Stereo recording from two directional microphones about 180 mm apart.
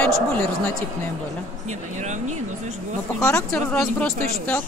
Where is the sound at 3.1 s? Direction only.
15° left (ahead or behind).